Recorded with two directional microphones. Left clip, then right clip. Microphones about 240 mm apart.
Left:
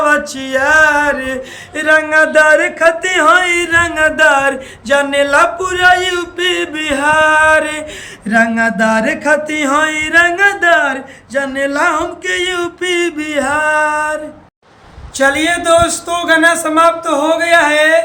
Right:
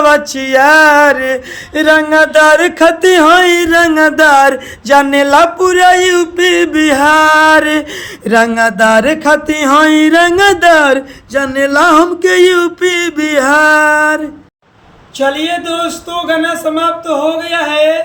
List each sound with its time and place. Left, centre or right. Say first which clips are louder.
0.0 s a sound: right 4 dB; centre
8.3 s mantra: right 3 dB; centre
15.2 s speech: left 1 dB; centre